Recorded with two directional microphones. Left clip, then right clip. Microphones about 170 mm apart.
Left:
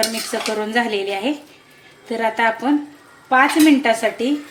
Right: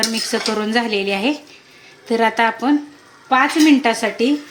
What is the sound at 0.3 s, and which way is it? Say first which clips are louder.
A woman's voice: right 2 dB; 50° right (ahead or behind).